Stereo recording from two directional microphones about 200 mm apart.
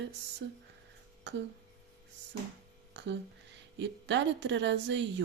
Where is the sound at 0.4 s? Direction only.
65° right (ahead or behind).